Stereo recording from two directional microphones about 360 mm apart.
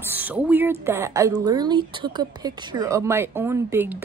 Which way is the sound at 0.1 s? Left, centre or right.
Centre.